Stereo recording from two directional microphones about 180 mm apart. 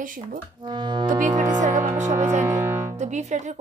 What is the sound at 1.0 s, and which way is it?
Speech, 45° right (ahead or behind).